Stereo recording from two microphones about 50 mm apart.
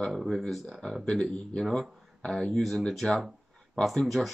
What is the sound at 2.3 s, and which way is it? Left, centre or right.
Speech, centre.